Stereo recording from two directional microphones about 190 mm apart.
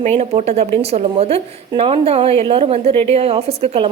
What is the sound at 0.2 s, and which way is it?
A woman's voice, 35° right (ahead or behind).